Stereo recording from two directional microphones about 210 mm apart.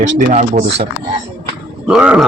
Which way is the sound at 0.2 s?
35° right (ahead or behind).